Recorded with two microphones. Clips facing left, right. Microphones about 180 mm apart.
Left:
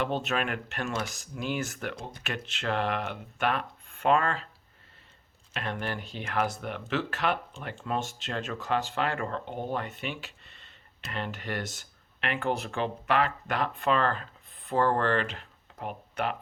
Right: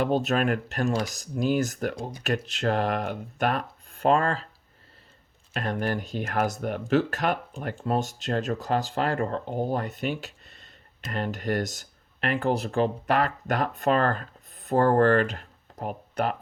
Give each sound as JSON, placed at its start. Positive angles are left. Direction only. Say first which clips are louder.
{"t": 0.0, "sound": "speech", "louder": "right 6 dB", "side_deg": -40}
{"t": 5.5, "sound": "speech", "louder": "right 6 dB", "side_deg": -40}